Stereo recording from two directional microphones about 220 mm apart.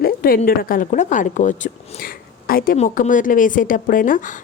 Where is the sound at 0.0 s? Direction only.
45° left (ahead or behind).